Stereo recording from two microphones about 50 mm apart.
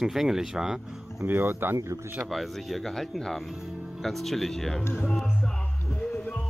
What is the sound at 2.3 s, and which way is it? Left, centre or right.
Speech, centre.